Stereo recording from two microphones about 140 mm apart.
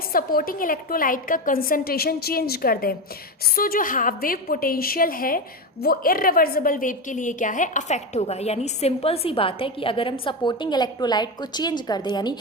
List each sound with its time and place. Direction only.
0.1 s a woman's voice: 90° left; by 12.4 s 30° left (ahead or behind)